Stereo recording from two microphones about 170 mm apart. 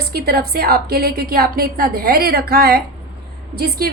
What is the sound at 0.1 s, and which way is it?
A woman's voice, 60° right (ahead or behind).